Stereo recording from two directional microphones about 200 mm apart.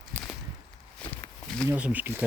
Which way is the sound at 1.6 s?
10° right (ahead or behind).